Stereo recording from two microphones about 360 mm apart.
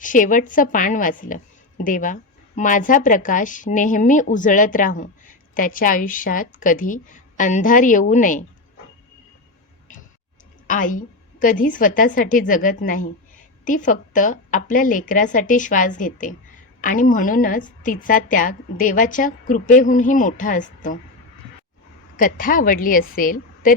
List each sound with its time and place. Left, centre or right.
0.0 s speech: left
10.7 s speech: left
22.1 s speech: left